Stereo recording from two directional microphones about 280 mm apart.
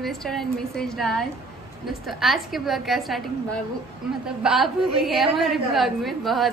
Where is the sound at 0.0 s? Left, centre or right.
Centre.